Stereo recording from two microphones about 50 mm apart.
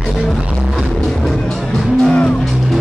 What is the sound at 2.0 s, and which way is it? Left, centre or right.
Music, left.